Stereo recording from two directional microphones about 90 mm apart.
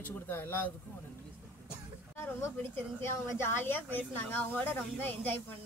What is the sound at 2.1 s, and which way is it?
A woman's voice, 25° left (ahead or behind).